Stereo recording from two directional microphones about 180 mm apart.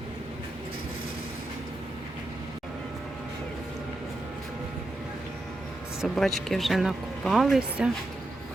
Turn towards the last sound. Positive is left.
turn(degrees=-5)  # may be behind; listen again after turning